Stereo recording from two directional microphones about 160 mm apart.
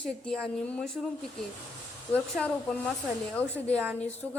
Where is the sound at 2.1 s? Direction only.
10° left (ahead or behind).